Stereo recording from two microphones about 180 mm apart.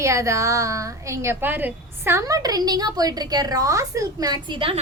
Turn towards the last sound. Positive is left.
turn(degrees=-25)  # may be behind; listen again after turning